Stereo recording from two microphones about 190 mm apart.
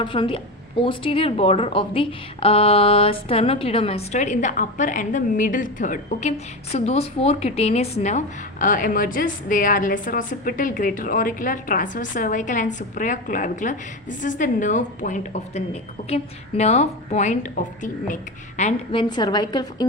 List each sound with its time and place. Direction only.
0.0 s a woman's voice: 25° left (ahead or behind)
8.6 s a woman's voice: 45° left (ahead or behind); by 19.9 s 20° left (ahead or behind)